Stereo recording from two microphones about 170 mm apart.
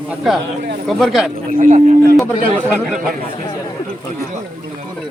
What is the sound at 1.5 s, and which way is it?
Speech, 50° right (ahead or behind).